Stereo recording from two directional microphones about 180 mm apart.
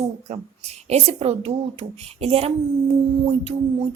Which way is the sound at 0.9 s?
35° right (ahead or behind).